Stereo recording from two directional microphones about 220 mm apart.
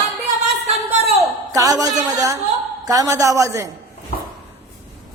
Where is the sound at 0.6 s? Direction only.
30° right (ahead or behind).